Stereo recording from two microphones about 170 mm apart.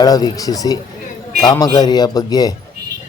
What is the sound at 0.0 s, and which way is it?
A man's voice, 20° left (ahead or behind).